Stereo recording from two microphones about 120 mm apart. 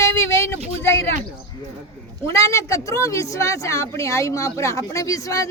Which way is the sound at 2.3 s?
25° left (ahead or behind).